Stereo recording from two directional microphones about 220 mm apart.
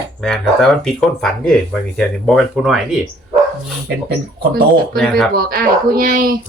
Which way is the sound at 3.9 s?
45° right (ahead or behind).